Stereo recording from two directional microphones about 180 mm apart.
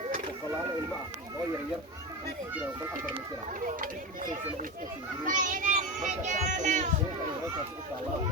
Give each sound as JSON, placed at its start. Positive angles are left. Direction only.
{"t": 3.7, "sound": "speech", "side_deg": -50}